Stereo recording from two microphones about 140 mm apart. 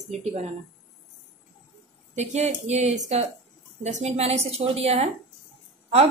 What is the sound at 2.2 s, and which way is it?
Speech, 50° right (ahead or behind).